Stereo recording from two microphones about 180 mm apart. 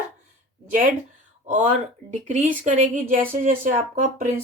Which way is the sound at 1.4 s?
45° right (ahead or behind).